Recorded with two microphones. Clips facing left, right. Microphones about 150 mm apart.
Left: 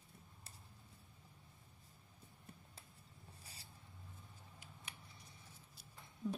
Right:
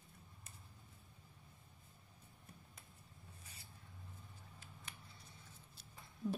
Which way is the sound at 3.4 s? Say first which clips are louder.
Left 1 dB; 35° left (ahead or behind).